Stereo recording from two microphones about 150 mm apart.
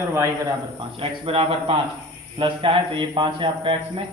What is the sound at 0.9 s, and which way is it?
Speech, 40° right (ahead or behind).